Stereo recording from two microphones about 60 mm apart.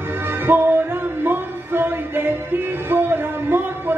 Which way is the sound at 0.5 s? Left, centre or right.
Right.